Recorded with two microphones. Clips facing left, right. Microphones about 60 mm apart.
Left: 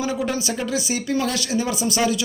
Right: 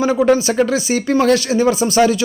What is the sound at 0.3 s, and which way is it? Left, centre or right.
A man's voice, right.